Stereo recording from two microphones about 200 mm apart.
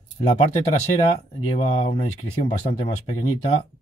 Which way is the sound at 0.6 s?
35° left (ahead or behind).